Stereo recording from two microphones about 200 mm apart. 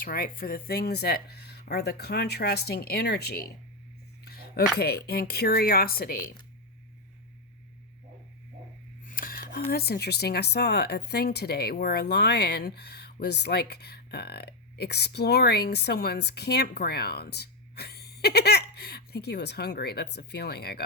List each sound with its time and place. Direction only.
0.0 s speech: 45° left (ahead or behind)
9.0 s speech: 45° left (ahead or behind)